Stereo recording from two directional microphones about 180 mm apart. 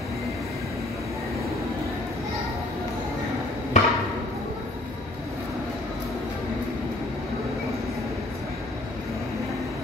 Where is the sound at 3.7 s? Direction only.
40° left (ahead or behind).